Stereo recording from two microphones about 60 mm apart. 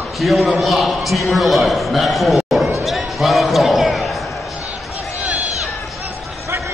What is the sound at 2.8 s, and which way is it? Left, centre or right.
Basketball bounce, centre.